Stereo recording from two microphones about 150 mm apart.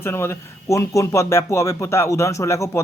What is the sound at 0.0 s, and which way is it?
Speech, 15° left (ahead or behind).